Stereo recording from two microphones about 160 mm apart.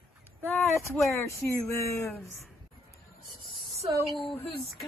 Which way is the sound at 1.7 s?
20° left (ahead or behind).